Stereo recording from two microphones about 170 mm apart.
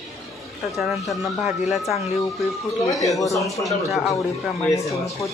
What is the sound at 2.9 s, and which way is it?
Speech, 20° left (ahead or behind).